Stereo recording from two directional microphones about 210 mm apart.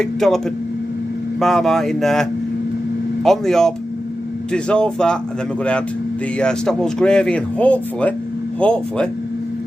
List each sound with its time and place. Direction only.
0.0 s speech: centre (ahead or behind)
3.2 s speech: centre (ahead or behind)
6.4 s speech: 5° left (ahead or behind)